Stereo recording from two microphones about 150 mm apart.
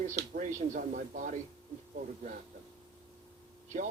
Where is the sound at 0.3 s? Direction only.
55° right (ahead or behind).